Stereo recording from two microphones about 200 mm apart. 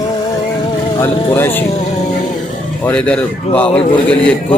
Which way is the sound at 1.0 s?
10° left (ahead or behind).